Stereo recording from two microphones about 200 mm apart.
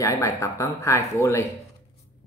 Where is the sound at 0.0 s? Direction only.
15° left (ahead or behind).